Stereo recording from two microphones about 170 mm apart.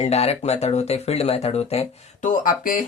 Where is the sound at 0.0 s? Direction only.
35° left (ahead or behind).